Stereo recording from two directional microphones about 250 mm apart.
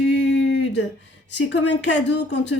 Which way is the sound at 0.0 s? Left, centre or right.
Left.